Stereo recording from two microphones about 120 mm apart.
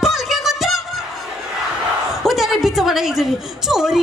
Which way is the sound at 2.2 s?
Centre (ahead or behind).